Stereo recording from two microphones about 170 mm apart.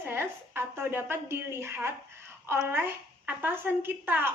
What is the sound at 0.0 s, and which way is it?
A woman's voice, 10° right (ahead or behind).